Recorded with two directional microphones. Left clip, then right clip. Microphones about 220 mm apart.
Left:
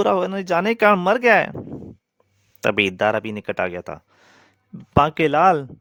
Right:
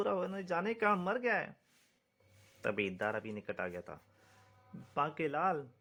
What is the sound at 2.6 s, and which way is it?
A man's voice, 50° left (ahead or behind).